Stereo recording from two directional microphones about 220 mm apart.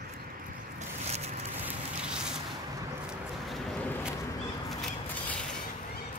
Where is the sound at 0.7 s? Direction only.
30° right (ahead or behind).